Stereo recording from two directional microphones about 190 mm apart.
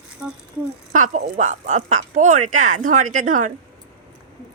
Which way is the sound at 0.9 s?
45° right (ahead or behind).